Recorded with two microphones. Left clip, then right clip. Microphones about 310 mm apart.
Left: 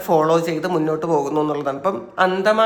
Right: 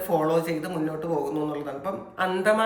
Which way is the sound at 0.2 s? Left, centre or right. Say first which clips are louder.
Left 7 dB; centre.